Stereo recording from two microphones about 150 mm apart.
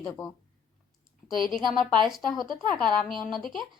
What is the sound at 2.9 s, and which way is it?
Speech, 35° right (ahead or behind).